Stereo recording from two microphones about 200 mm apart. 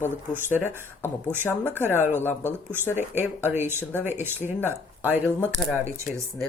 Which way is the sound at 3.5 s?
10° right (ahead or behind).